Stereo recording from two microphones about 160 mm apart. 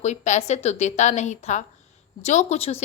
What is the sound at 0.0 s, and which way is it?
A woman's voice, 45° left (ahead or behind).